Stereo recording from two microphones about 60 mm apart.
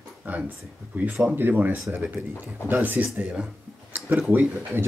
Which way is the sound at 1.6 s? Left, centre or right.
Right.